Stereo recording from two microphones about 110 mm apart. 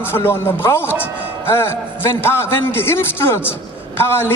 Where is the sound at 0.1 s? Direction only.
20° left (ahead or behind).